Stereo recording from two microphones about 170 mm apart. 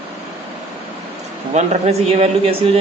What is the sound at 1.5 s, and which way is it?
Speech, 40° right (ahead or behind).